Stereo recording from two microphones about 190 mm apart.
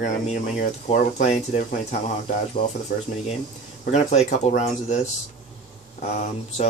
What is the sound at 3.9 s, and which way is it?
Speech, 35° left (ahead or behind).